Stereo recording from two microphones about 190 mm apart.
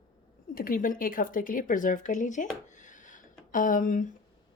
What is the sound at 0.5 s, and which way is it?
A woman's voice, 50° left (ahead or behind).